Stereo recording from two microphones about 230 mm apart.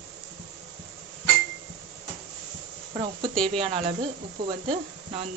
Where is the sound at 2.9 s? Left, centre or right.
Centre.